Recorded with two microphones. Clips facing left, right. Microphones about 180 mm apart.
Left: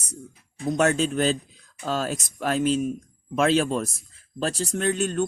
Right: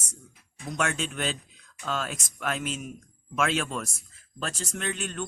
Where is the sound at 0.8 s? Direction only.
35° left (ahead or behind).